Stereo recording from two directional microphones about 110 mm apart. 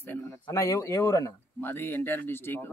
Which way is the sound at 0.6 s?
30° left (ahead or behind).